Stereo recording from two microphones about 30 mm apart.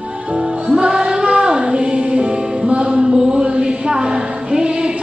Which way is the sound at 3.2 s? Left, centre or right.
Right.